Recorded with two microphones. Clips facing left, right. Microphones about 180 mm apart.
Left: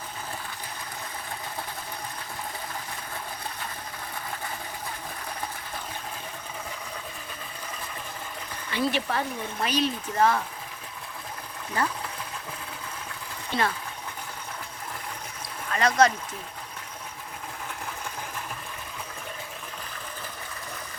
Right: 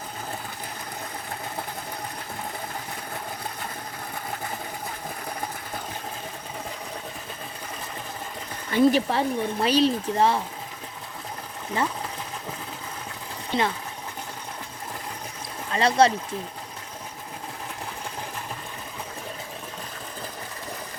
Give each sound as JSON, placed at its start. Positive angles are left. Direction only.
{"t": 8.7, "sound": "speech", "side_deg": -45}
{"t": 9.0, "sound": "speech", "side_deg": -30}
{"t": 13.5, "sound": "speech", "side_deg": -20}
{"t": 15.7, "sound": "speech", "side_deg": -30}